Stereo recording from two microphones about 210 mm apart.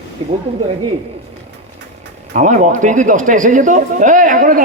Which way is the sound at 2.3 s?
35° right (ahead or behind).